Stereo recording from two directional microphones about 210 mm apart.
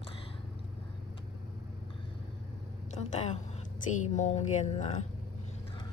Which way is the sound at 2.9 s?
35° left (ahead or behind).